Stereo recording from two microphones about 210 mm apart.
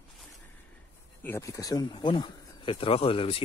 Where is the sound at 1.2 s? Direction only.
15° left (ahead or behind).